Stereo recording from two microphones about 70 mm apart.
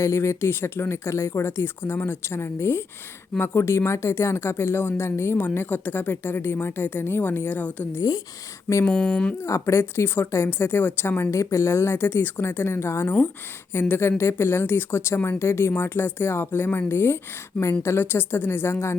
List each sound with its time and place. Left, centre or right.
0.0 s speech: left
5.5 s speech: left
8.9 s speech: centre
9.4 s speech: left
11.2 s speech: left